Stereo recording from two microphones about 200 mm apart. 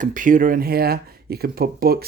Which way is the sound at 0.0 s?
40° right (ahead or behind).